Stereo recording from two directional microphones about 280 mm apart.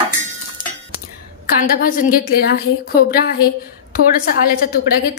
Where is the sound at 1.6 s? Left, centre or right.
Left.